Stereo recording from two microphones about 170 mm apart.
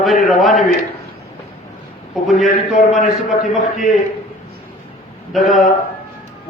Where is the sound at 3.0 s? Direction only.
Centre (ahead or behind).